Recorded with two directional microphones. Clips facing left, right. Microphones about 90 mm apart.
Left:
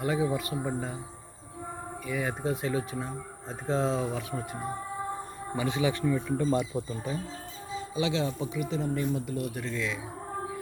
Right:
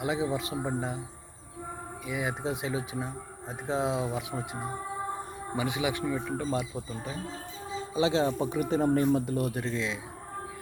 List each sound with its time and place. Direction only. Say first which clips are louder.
0.0 s speech: left 1 dB; 20° right (ahead or behind)
2.0 s speech: left 1 dB; 20° right (ahead or behind)
5.5 s speech: left 2 dB; 15° right (ahead or behind)
7.9 s speech: right 4 dB; 35° right (ahead or behind)